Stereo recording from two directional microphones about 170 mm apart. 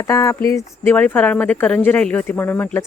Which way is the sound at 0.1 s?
20° left (ahead or behind).